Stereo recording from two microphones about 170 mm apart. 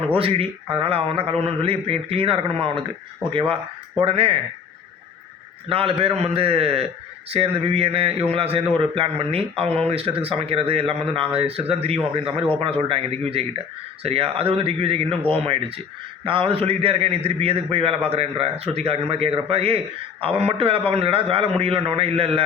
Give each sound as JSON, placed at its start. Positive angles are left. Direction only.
{"t": 0.1, "sound": "a man's voice", "side_deg": -35}
{"t": 5.6, "sound": "a man's voice", "side_deg": -35}